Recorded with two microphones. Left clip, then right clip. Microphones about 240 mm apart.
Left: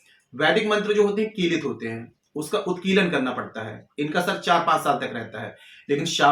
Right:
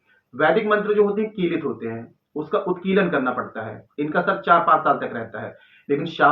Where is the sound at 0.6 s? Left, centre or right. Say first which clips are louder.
Right 2 dB; left.